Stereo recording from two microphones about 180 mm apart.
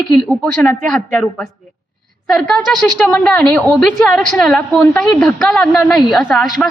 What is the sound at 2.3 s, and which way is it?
A woman's voice, 5° left (ahead or behind).